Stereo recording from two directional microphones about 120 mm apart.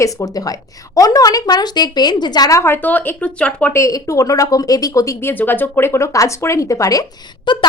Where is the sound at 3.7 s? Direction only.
25° left (ahead or behind).